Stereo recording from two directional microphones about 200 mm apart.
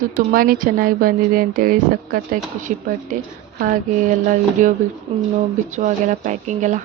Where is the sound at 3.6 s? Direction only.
40° right (ahead or behind).